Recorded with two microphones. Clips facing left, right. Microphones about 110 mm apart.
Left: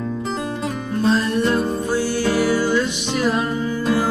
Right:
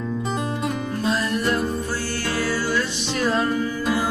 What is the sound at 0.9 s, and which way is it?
Music, 25° left (ahead or behind).